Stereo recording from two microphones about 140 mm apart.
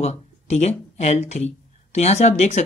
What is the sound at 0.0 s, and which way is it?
Speech, 50° left (ahead or behind).